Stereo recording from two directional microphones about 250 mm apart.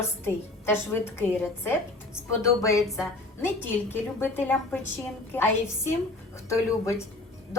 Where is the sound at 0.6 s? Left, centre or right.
Centre.